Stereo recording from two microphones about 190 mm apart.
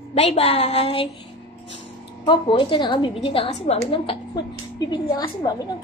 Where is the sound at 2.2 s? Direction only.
25° left (ahead or behind).